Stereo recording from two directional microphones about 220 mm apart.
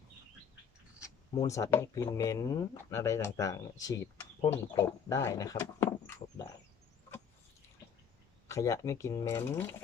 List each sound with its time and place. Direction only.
1.0 s speech: 15° left (ahead or behind)
6.4 s a sound: 15° left (ahead or behind)
8.4 s speech: 15° left (ahead or behind)